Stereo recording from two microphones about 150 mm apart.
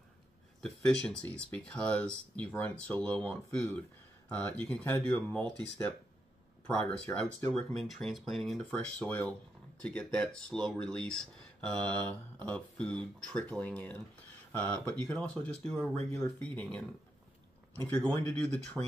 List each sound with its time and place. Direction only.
0.6 s speech: 5° left (ahead or behind)
6.9 s speech: 15° left (ahead or behind)
7.5 s speech: 5° left (ahead or behind)
17.8 s speech: 10° left (ahead or behind)